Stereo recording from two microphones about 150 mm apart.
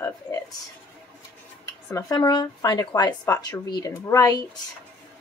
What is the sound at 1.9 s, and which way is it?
Speech, 20° left (ahead or behind).